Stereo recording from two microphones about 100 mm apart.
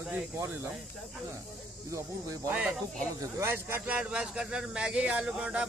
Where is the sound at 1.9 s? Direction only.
35° right (ahead or behind).